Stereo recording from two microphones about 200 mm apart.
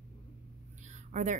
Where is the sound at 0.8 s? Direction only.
35° right (ahead or behind).